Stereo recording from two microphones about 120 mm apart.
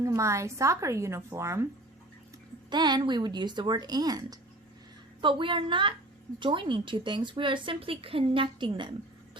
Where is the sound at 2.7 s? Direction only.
40° right (ahead or behind).